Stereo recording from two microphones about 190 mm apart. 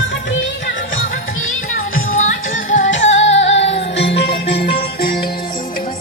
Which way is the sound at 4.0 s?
65° left (ahead or behind).